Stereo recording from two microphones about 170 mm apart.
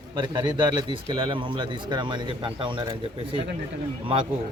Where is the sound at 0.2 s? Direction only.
25° right (ahead or behind).